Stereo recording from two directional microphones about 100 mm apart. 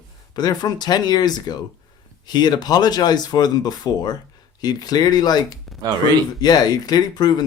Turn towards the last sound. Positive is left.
turn(degrees=45)  # may be behind; listen again after turning